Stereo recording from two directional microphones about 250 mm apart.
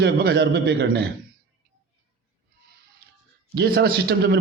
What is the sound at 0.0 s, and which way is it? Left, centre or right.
A man's voice, right.